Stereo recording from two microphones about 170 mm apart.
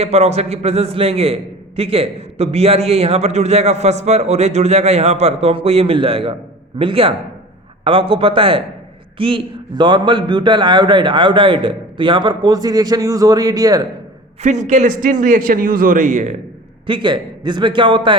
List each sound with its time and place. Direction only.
0.0 s a man's voice: 40° right (ahead or behind); by 13.8 s 20° right (ahead or behind)
14.4 s a man's voice: 45° right (ahead or behind)
16.8 s a man's voice: 30° right (ahead or behind)